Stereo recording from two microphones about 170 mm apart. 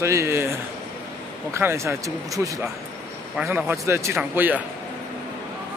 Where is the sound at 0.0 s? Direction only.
15° right (ahead or behind).